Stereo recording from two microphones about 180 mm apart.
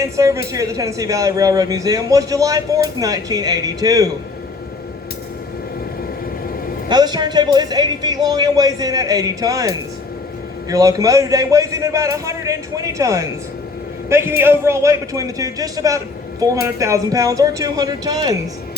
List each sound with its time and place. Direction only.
0.0 s a man's voice: 20° right (ahead or behind)
6.8 s a man's voice: 25° right (ahead or behind)